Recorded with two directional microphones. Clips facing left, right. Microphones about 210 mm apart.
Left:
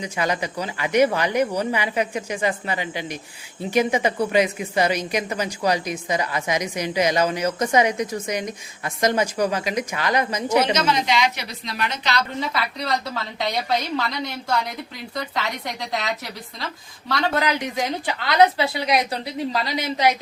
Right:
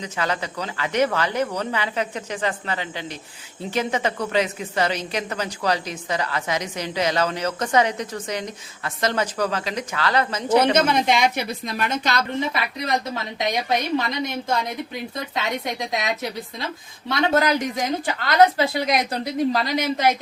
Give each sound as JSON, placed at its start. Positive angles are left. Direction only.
{"t": 0.0, "sound": "a woman's voice", "side_deg": 15}
{"t": 10.6, "sound": "a woman's voice", "side_deg": -55}
{"t": 12.4, "sound": "a woman's voice", "side_deg": -20}
{"t": 17.3, "sound": "a woman's voice", "side_deg": -40}